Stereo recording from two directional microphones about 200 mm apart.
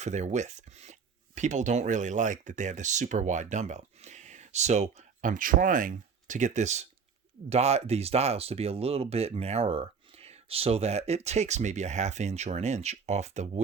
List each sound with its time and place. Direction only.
0.0 s speech: 35° right (ahead or behind)